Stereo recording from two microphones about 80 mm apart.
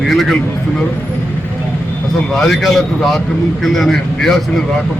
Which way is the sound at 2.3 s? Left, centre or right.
Centre.